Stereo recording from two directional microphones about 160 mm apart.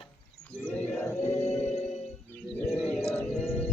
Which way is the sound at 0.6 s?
10° left (ahead or behind).